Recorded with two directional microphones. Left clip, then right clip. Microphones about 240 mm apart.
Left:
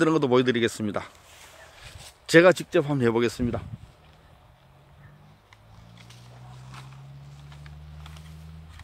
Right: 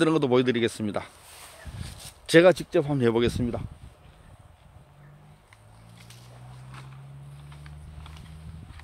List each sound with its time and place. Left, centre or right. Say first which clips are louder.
0.0 s speech: left 1 dB; centre
7.4 s vehicle: left 1 dB; left